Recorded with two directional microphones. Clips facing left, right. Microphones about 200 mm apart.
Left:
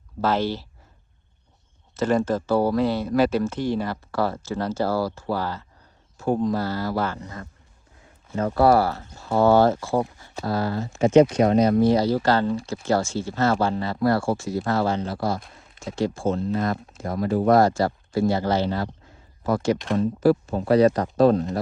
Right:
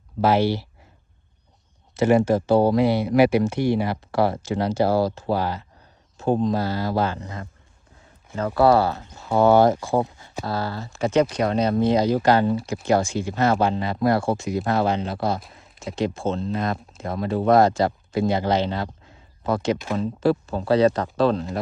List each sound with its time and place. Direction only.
0.2 s speech: 10° right (ahead or behind)
2.0 s speech: 10° right (ahead or behind)
8.3 s speech: 30° left (ahead or behind)
8.6 s speech: 20° right (ahead or behind)
15.4 s speech: centre (ahead or behind)
16.0 s speech: 20° right (ahead or behind)
20.1 s speech: 25° right (ahead or behind)
21.2 s speech: 45° left (ahead or behind)